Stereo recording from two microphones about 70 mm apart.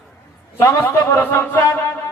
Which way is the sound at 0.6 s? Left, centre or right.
Left.